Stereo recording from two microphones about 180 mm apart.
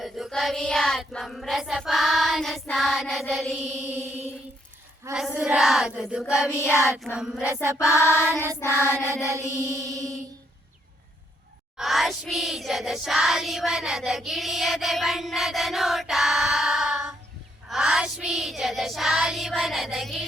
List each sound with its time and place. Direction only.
0.0 s child singing: centre (ahead or behind)
5.0 s mantra: 15° right (ahead or behind)
5.4 s child singing: 5° right (ahead or behind)
6.5 s child singing: 15° left (ahead or behind)
6.9 s child singing: 5° right (ahead or behind)
7.5 s mantra: 15° right (ahead or behind)
7.9 s child singing: 15° left (ahead or behind)
9.5 s mantra: 15° right (ahead or behind)
11.8 s a sound: centre (ahead or behind)
17.7 s child singing: 5° right (ahead or behind)